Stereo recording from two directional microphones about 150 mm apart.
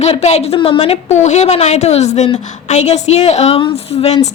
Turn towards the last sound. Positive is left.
turn(degrees=40)  # may be behind; listen again after turning